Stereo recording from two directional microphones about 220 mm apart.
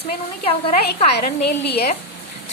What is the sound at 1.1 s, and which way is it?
Speech, 45° left (ahead or behind).